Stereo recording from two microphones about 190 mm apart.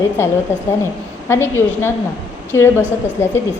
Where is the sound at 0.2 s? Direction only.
15° left (ahead or behind).